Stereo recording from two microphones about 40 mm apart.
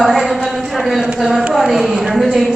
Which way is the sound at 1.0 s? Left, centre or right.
Centre.